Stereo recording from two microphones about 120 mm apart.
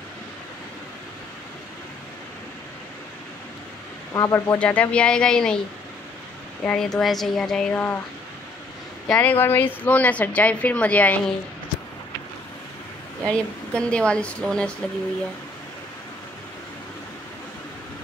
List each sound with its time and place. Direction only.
4.1 s speech: 25° left (ahead or behind)
4.5 s a woman's voice: 10° left (ahead or behind)
6.6 s speech: 5° left (ahead or behind)
7.7 s a woman's voice: 15° left (ahead or behind)
9.0 s a woman's voice: 10° left (ahead or behind)
13.2 s a woman's voice: 10° left (ahead or behind)